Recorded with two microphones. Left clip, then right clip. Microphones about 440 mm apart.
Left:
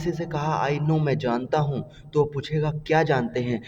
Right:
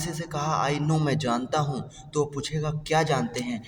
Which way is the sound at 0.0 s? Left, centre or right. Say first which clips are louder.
Left 3 dB; left.